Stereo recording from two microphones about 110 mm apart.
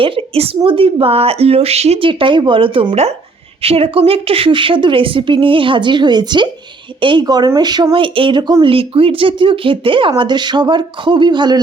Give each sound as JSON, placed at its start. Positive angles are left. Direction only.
{"t": 0.0, "sound": "speech", "side_deg": -55}
{"t": 2.0, "sound": "speech", "side_deg": -50}
{"t": 7.9, "sound": "speech", "side_deg": -50}
{"t": 8.6, "sound": "speech", "side_deg": -55}